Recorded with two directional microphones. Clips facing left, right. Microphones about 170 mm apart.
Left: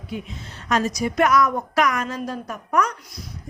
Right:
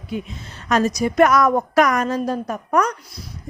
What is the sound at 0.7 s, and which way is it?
A woman's voice, 45° right (ahead or behind).